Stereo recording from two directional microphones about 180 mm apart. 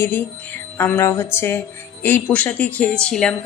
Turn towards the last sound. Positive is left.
turn(degrees=5)  # may be behind; listen again after turning